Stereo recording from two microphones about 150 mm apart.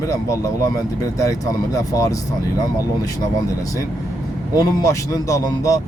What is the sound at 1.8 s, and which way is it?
Speech, 25° left (ahead or behind).